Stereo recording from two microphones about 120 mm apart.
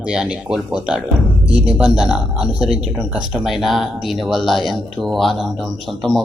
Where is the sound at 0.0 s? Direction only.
10° right (ahead or behind).